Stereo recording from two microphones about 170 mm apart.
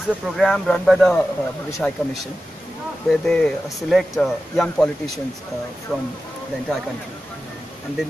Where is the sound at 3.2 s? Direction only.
5° left (ahead or behind).